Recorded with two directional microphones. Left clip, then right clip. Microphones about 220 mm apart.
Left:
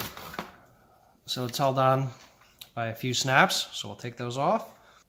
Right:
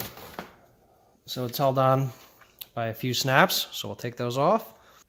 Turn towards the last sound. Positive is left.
turn(degrees=-35)  # may be behind; listen again after turning